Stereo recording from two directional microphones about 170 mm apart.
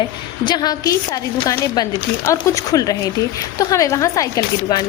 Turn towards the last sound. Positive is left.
turn(degrees=20)  # may be behind; listen again after turning